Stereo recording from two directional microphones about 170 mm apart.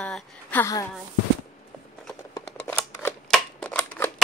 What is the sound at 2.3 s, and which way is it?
Scissors, 15° left (ahead or behind).